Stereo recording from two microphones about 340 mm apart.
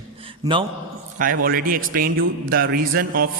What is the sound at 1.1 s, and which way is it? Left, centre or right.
A man's voice, right.